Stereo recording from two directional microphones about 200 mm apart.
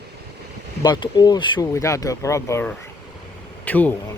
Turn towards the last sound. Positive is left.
turn(degrees=10)  # may be behind; listen again after turning